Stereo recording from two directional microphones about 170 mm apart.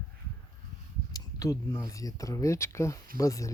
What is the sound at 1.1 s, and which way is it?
Speech, 20° left (ahead or behind).